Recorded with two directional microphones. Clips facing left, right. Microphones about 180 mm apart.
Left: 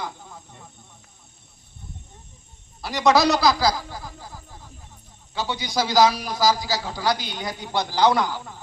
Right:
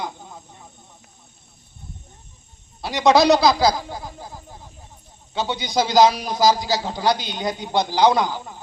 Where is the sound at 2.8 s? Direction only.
20° right (ahead or behind).